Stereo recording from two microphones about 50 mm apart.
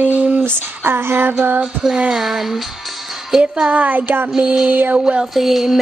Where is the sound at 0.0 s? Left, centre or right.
Right.